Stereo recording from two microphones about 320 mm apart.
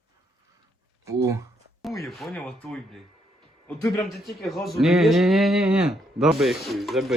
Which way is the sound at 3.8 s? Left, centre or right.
Centre.